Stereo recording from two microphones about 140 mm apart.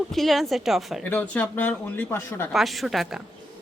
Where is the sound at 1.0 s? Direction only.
15° left (ahead or behind).